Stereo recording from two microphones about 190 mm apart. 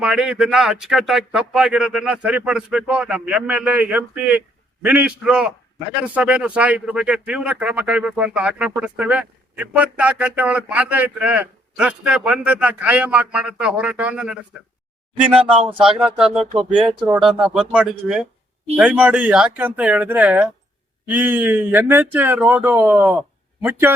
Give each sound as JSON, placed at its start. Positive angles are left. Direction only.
{"t": 0.0, "sound": "speech", "side_deg": -5}
{"t": 16.6, "sound": "speech", "side_deg": -25}
{"t": 17.0, "sound": "speech", "side_deg": -5}